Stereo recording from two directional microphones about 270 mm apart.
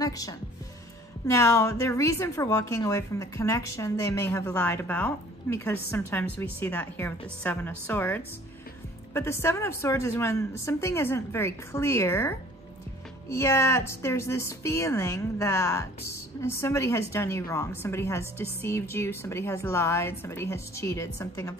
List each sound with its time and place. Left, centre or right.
0.0 s speech: centre